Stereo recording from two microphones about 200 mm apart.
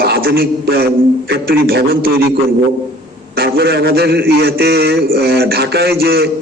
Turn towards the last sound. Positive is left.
turn(degrees=-50)  # may be behind; listen again after turning